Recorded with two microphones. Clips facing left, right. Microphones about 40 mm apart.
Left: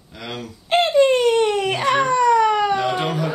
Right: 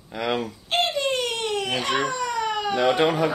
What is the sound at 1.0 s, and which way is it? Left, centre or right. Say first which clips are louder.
Baby cry: left 10 dB; left.